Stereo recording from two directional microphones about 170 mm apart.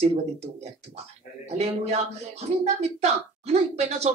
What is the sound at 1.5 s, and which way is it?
A woman's voice, 40° right (ahead or behind).